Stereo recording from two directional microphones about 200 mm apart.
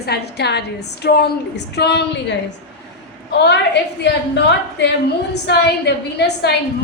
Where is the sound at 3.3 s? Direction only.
55° left (ahead or behind).